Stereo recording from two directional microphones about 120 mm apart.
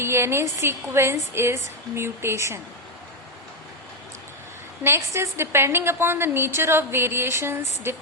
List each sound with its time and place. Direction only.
0.0 s a woman's voice: 20° right (ahead or behind)
4.8 s a woman's voice: 20° right (ahead or behind)